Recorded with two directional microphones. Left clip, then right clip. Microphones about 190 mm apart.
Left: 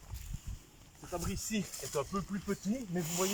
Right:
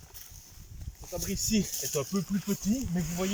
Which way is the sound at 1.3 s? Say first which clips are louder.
Right 8 dB; 20° right (ahead or behind).